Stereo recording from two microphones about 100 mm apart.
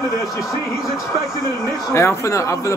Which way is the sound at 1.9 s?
30° left (ahead or behind).